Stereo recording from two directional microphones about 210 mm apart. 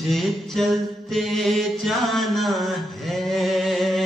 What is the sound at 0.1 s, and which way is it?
Mantra, centre (ahead or behind).